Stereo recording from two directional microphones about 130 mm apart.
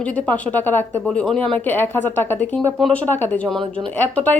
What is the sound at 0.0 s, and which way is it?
Speech, 10° left (ahead or behind).